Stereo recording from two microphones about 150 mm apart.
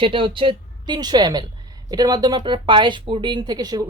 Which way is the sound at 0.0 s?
35° right (ahead or behind).